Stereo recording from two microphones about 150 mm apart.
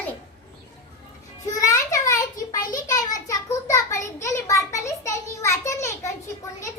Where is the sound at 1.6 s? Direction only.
20° left (ahead or behind).